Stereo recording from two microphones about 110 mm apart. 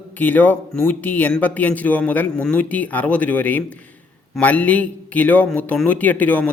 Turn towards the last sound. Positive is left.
turn(degrees=15)  # may be behind; listen again after turning